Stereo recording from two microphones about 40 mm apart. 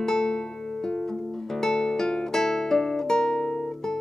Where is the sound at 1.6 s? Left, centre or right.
Centre.